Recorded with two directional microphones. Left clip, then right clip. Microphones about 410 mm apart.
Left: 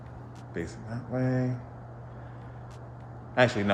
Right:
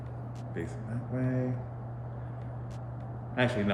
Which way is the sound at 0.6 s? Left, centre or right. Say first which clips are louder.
Left 3 dB; centre.